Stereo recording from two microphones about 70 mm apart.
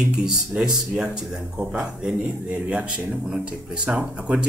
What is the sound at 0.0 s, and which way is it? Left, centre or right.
Speech, centre.